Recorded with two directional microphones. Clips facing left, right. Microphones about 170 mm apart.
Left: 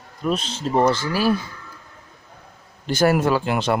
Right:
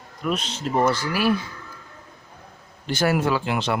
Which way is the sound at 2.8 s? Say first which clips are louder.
Left 3 dB; 45° left (ahead or behind).